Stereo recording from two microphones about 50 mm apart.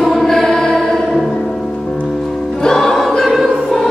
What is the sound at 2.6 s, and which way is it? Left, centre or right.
Choir, centre.